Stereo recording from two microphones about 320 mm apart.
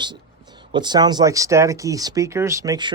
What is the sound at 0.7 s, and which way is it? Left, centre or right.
Speech, centre.